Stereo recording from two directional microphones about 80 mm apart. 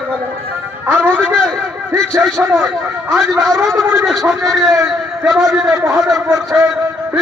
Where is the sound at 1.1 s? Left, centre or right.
Centre.